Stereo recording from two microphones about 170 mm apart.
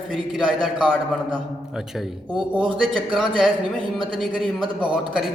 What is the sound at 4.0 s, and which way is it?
Speech, 30° right (ahead or behind).